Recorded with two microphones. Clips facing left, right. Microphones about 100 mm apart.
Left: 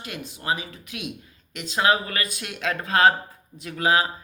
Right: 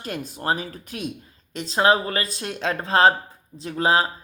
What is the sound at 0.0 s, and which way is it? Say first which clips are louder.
Speech: right 5 dB; 40° right (ahead or behind).